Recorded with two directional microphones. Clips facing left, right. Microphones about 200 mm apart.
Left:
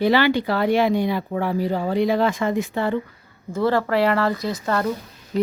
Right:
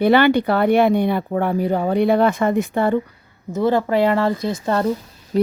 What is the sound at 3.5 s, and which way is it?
Speech, 20° right (ahead or behind).